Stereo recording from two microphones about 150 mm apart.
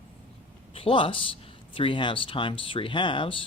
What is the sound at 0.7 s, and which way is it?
Speech, 35° left (ahead or behind).